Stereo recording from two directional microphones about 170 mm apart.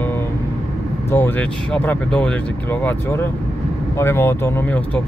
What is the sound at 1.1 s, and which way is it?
Speech, 10° left (ahead or behind).